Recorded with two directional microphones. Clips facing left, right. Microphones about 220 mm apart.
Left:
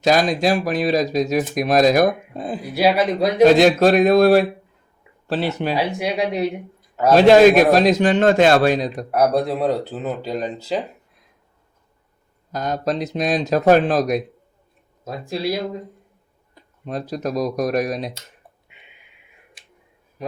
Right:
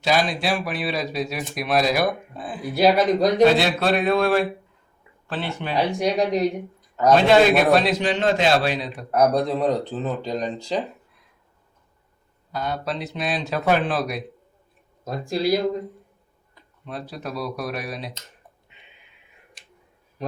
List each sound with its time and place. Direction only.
0.0 s a man's voice: 45° left (ahead or behind)
2.7 s speech: 5° left (ahead or behind)
3.4 s speech: 45° left (ahead or behind)
5.7 s speech: 5° left (ahead or behind)
7.3 s a man's voice: 40° left (ahead or behind)
9.1 s speech: 5° left (ahead or behind)
12.5 s speech: 45° left (ahead or behind)
15.3 s speech: centre (ahead or behind)
16.8 s a man's voice: 40° left (ahead or behind)